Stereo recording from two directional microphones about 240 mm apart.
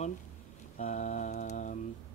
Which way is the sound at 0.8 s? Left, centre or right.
Left.